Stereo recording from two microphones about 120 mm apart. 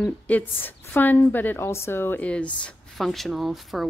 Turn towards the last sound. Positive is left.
turn(degrees=0)  # may be behind; listen again after turning